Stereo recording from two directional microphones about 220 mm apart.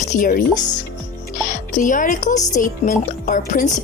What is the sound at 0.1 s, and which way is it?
Speech, 35° left (ahead or behind).